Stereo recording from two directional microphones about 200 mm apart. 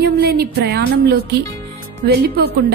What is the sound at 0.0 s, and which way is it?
Music, 50° right (ahead or behind).